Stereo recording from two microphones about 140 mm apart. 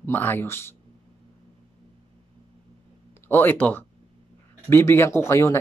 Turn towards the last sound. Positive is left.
turn(degrees=20)  # may be behind; listen again after turning